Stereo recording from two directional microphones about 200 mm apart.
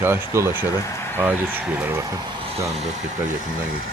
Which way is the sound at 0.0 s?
10° right (ahead or behind).